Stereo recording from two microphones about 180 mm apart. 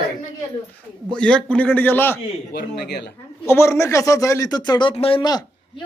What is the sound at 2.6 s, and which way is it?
Speech, 65° left (ahead or behind).